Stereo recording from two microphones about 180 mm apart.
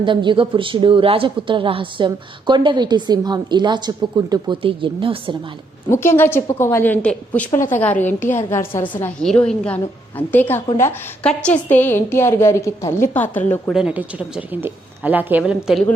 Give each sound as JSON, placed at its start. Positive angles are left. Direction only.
{"t": 0.0, "sound": "a woman's voice", "side_deg": -25}
{"t": 5.9, "sound": "a woman's voice", "side_deg": 15}
{"t": 13.8, "sound": "a woman's voice", "side_deg": -10}